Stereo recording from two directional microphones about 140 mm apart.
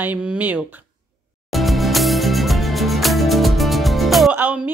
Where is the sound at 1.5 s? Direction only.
Centre (ahead or behind).